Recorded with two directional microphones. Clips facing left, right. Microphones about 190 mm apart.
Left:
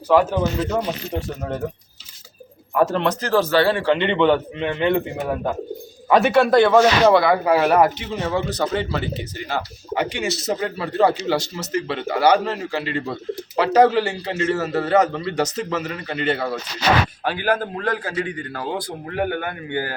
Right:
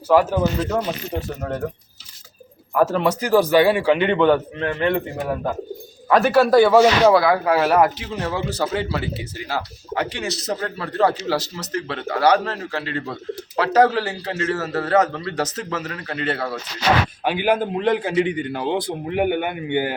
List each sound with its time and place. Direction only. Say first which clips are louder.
0.1 s a man's voice: even; 5° right (ahead or behind)
2.7 s a man's voice: right 1 dB; 5° right (ahead or behind)
17.2 s a man's voice: right 2 dB; 15° right (ahead or behind)